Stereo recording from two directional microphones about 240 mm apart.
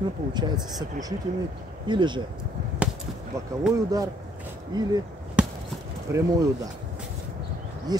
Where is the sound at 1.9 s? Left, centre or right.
Centre.